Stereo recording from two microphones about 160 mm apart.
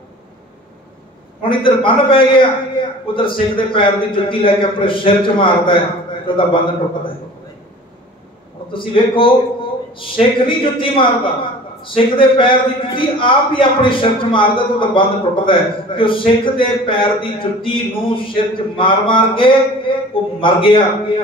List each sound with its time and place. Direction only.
1.4 s a man's voice: 30° left (ahead or behind)
8.7 s a man's voice: 35° left (ahead or behind)